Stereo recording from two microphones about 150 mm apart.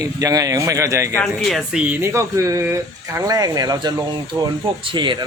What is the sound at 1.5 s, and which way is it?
Speech, 5° right (ahead or behind).